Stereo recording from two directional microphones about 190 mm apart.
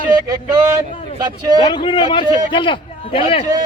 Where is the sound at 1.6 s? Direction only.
25° left (ahead or behind).